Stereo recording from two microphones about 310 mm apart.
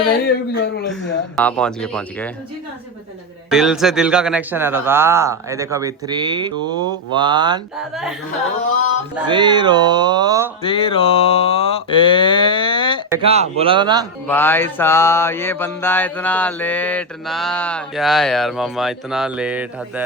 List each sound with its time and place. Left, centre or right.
0.3 s speech: left
1.4 s mantra: centre
3.5 s a man's voice: centre
7.8 s mantra: centre
9.2 s a man's voice: centre
10.6 s mantra: centre
13.1 s a man's voice: centre
14.3 s mantra: centre